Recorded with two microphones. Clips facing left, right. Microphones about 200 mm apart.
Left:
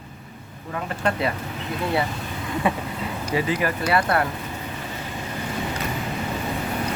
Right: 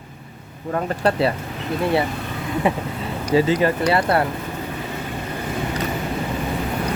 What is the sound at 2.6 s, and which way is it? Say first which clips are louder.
Speech: right 2 dB; 20° right (ahead or behind).